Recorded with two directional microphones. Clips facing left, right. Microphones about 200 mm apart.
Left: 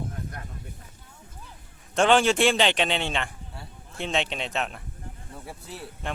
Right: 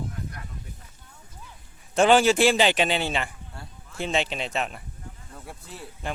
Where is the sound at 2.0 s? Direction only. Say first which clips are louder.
Right 2 dB; 5° right (ahead or behind).